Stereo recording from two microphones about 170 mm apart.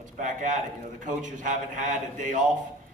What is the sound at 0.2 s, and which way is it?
A man's voice, 45° right (ahead or behind).